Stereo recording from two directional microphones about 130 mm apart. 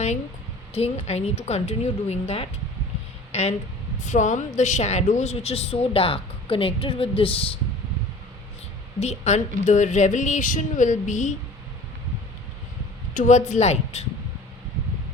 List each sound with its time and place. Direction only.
0.7 s a woman's voice: 55° left (ahead or behind)
4.0 s a woman's voice: 70° left (ahead or behind); by 7.6 s 45° left (ahead or behind)
9.0 s a woman's voice: 60° left (ahead or behind)
13.1 s a woman's voice: 65° left (ahead or behind)